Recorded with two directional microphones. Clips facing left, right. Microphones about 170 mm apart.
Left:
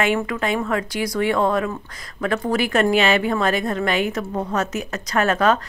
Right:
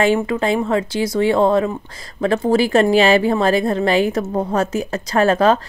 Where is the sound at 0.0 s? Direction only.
30° right (ahead or behind).